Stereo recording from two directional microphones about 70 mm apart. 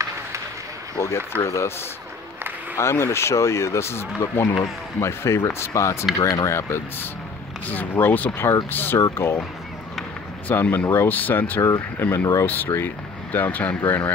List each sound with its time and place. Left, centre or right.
0.9 s speech: left
2.8 s speech: left
6.1 s speech: left
10.5 s speech: left
11.6 s speech: left